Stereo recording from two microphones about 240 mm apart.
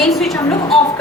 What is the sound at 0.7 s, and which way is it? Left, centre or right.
Speech, centre.